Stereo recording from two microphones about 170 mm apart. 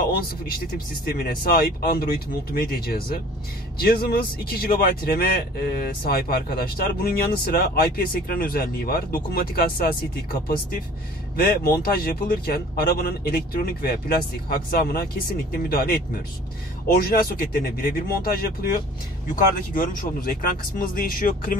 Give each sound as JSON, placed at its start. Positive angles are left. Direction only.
{"t": 1.0, "sound": "speech", "side_deg": 60}
{"t": 11.3, "sound": "speech", "side_deg": 65}